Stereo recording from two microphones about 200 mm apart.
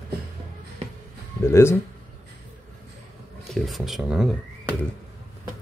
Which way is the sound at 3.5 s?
Centre (ahead or behind).